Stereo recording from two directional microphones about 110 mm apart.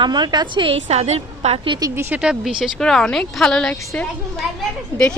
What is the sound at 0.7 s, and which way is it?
Speech, 75° right (ahead or behind).